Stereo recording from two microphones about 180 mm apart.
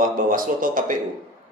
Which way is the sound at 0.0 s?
50° right (ahead or behind).